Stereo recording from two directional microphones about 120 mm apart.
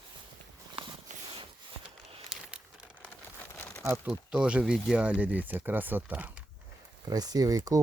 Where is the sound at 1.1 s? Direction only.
80° right.